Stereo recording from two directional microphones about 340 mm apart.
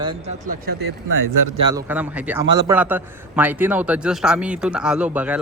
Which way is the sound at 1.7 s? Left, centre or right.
Centre.